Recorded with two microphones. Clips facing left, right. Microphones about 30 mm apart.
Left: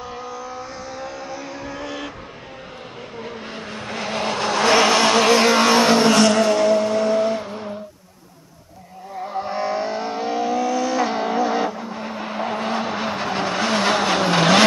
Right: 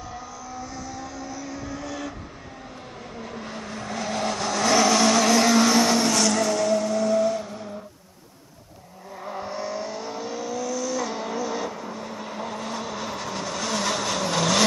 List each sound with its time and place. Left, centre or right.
0.2 s vehicle: left
3.2 s vehicle: left
9.3 s vehicle: left
12.0 s vehicle: left